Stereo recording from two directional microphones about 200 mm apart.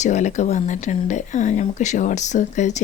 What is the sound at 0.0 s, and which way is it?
Speech, 35° left (ahead or behind).